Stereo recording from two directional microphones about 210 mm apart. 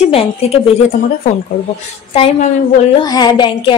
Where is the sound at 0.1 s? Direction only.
30° left (ahead or behind).